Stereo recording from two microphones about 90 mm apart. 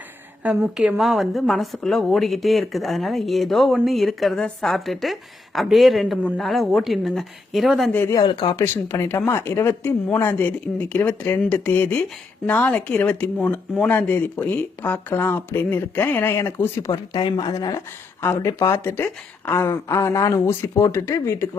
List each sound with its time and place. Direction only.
0.4 s a woman's voice: 10° right (ahead or behind)
8.3 s speech: 55° left (ahead or behind)
8.5 s speech: 25° left (ahead or behind)
16.9 s speech: 50° left (ahead or behind); by 21.4 s 30° left (ahead or behind)